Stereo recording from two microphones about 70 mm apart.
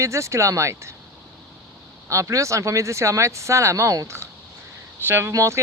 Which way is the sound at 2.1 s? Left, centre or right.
Right.